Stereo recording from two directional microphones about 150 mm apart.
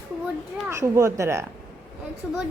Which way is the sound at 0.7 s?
20° right (ahead or behind).